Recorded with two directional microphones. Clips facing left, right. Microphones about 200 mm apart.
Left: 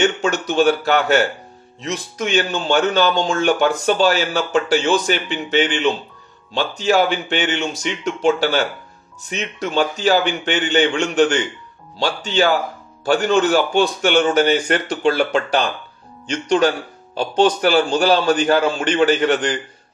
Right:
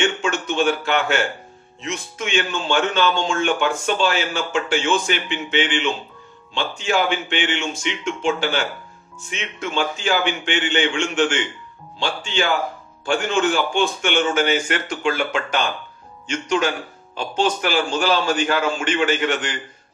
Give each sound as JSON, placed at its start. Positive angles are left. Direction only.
{"t": 0.0, "sound": "speech", "side_deg": 40}